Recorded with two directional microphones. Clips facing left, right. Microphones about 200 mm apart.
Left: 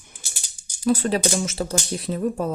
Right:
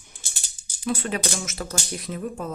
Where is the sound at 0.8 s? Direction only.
40° left (ahead or behind).